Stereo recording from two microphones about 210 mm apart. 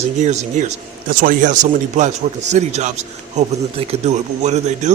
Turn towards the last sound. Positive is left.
turn(degrees=-30)  # may be behind; listen again after turning